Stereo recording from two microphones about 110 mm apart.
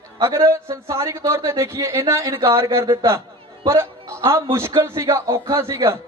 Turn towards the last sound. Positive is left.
turn(degrees=-25)  # may be behind; listen again after turning